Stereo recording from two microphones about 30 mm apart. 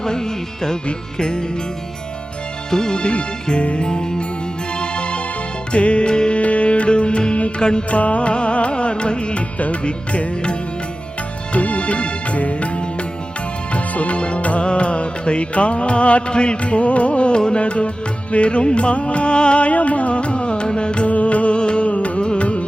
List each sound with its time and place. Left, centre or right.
0.0 s music: centre
2.6 s speech: left
3.0 s music: left
3.8 s music: left
6.4 s music: left
7.9 s music: left
14.2 s music: left
16.3 s music: left
16.6 s music: left
19.6 s music: left
21.1 s music: left
21.6 s music: left
21.8 s music: left
22.2 s music: left